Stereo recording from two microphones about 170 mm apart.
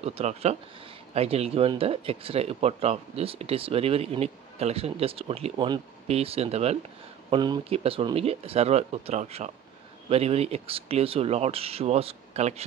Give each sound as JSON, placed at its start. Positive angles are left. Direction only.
{"t": 0.0, "sound": "speech", "side_deg": -40}
{"t": 7.2, "sound": "speech", "side_deg": -25}